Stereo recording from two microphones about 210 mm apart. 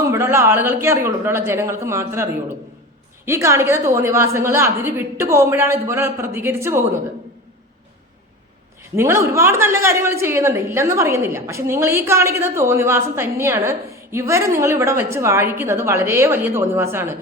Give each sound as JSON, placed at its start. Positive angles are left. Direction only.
{"t": 0.1, "sound": "speech", "side_deg": -10}
{"t": 3.2, "sound": "speech", "side_deg": -15}
{"t": 9.0, "sound": "speech", "side_deg": -10}